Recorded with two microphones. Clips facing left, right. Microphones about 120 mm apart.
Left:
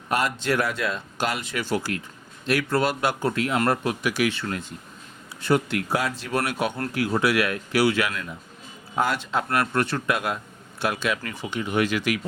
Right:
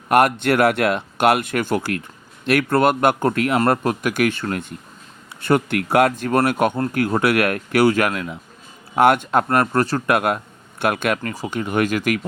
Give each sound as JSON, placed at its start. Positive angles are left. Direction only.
{"t": 0.1, "sound": "speech", "side_deg": -60}
{"t": 10.1, "sound": "speech", "side_deg": -55}